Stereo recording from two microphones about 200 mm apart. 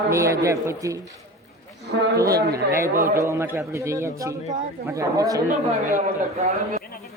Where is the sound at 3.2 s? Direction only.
15° right (ahead or behind).